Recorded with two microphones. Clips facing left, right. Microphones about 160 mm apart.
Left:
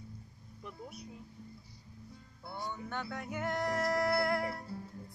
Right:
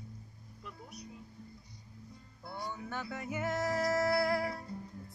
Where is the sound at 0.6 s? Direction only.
25° left (ahead or behind).